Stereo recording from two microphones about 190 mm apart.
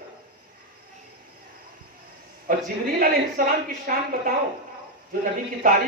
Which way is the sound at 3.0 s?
50° right (ahead or behind).